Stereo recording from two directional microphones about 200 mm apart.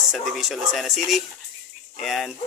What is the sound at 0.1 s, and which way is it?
Speech, centre (ahead or behind).